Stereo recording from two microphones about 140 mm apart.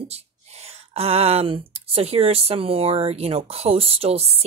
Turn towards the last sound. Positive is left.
turn(degrees=-45)  # may be behind; listen again after turning